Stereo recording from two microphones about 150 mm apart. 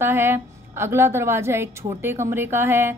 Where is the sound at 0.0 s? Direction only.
15° right (ahead or behind).